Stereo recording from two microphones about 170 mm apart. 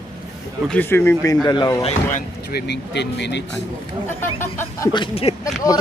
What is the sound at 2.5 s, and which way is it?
Speech, 80° left.